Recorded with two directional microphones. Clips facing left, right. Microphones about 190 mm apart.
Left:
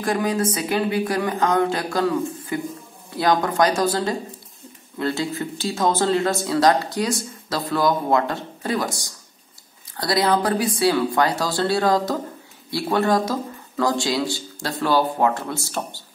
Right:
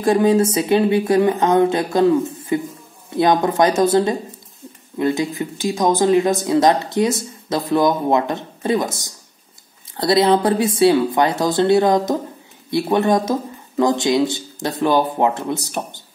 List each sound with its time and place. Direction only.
0.0 s speech: 25° right (ahead or behind)